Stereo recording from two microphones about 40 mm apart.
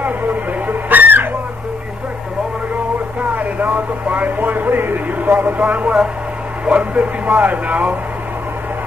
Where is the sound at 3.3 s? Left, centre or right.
Right.